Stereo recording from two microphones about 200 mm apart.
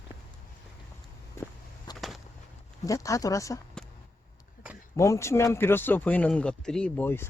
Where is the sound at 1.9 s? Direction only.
Centre (ahead or behind).